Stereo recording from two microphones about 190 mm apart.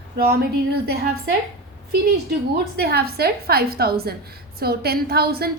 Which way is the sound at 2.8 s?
55° right (ahead or behind).